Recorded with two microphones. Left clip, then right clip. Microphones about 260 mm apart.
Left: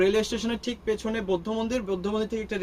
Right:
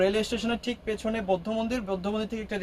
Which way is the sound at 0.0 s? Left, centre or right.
Centre.